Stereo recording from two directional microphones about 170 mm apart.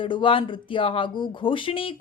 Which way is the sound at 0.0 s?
30° left (ahead or behind).